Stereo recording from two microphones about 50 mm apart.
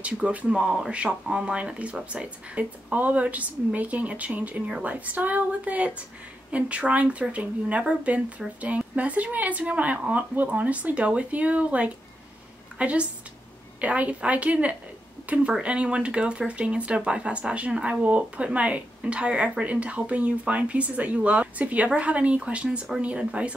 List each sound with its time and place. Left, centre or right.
0.0 s speech: right
0.5 s a woman's voice: centre